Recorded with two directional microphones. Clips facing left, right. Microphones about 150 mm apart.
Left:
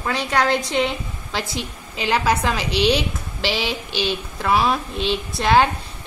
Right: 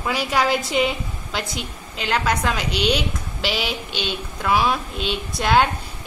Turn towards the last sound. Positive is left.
turn(degrees=0)  # may be behind; listen again after turning